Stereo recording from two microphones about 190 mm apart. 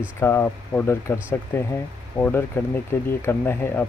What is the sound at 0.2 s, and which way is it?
Speech, 10° left (ahead or behind).